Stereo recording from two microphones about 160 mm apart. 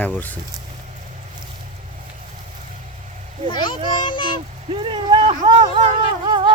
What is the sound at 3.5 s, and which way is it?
Speech, 30° left (ahead or behind).